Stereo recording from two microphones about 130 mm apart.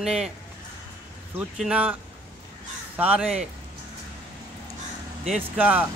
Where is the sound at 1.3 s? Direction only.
10° right (ahead or behind).